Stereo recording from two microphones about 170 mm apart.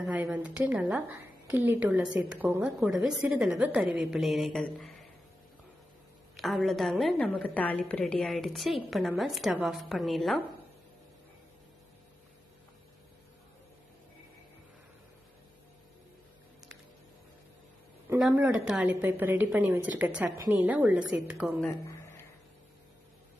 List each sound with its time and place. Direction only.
0.0 s a woman's voice: 10° right (ahead or behind)
6.3 s a woman's voice: centre (ahead or behind)
18.2 s a woman's voice: 5° right (ahead or behind)
21.8 s a sound: 15° left (ahead or behind)